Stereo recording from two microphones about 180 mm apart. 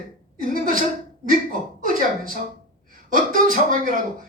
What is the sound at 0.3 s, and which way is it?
Speech, 50° right (ahead or behind).